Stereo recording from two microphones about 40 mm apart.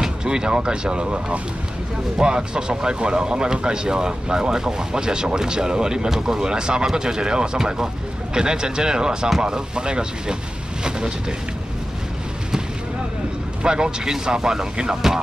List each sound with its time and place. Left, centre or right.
0.0 s speech: centre
13.6 s speech: right